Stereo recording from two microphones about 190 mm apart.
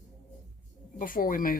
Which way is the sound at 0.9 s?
45° left (ahead or behind).